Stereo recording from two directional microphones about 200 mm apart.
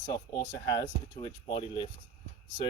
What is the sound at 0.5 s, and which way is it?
Speech, 15° left (ahead or behind).